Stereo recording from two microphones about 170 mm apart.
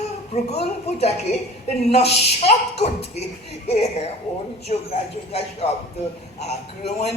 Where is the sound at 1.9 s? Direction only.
40° left (ahead or behind).